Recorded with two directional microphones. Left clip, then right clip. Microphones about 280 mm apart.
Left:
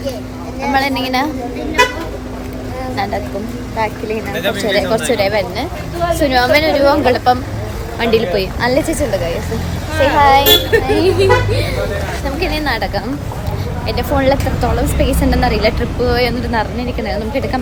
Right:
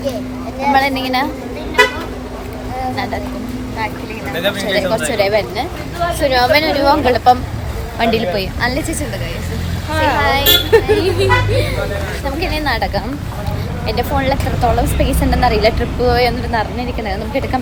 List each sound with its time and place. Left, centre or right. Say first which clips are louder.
0.7 s a woman's voice: right 1 dB; centre
4.7 s a woman's voice: left 3 dB; centre
9.9 s speech: left 1 dB; centre
10.2 s speech: left 10 dB; left
10.7 s speech: right 2 dB; centre
10.9 s a woman's voice: left 2 dB; centre